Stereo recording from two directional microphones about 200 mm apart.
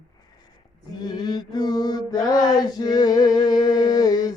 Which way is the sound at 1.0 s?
20° left (ahead or behind).